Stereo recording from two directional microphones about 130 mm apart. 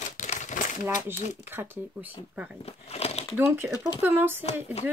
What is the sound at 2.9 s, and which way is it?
Crumpling, 55° left (ahead or behind).